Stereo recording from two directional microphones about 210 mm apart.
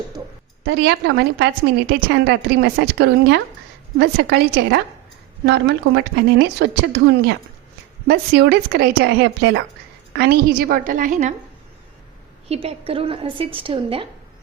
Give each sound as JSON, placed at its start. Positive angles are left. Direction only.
{"t": 0.6, "sound": "a woman's voice", "side_deg": -55}
{"t": 12.5, "sound": "a woman's voice", "side_deg": -30}